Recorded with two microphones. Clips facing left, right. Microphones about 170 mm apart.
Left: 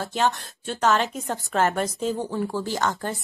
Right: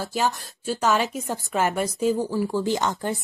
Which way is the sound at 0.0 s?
Centre (ahead or behind).